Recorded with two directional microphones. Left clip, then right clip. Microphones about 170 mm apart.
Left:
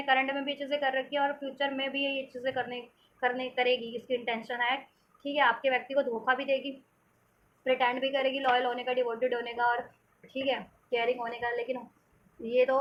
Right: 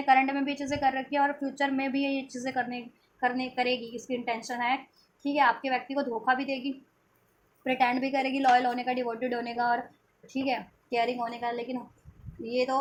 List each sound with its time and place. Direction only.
0.0 s a woman's voice: 40° right (ahead or behind)
7.6 s a woman's voice: 45° right (ahead or behind)